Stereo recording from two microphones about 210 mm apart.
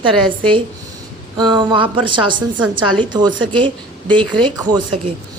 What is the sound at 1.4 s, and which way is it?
Speech, 20° right (ahead or behind).